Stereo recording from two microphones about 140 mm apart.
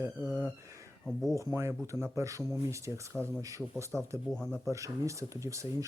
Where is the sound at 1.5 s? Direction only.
20° right (ahead or behind).